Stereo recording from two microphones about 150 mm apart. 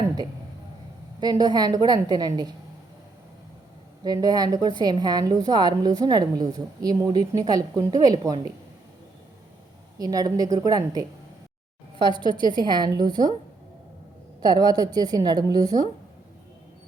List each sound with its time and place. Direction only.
1.2 s a woman's voice: 25° right (ahead or behind)
4.0 s a woman's voice: 25° right (ahead or behind)
10.0 s a woman's voice: 25° right (ahead or behind)
12.4 s a woman's voice: 30° right (ahead or behind)
14.4 s a woman's voice: 25° right (ahead or behind)